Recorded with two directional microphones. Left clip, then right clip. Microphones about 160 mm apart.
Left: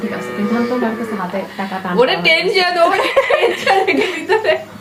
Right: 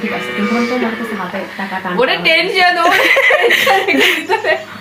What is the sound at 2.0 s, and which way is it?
Speech, 65° left (ahead or behind).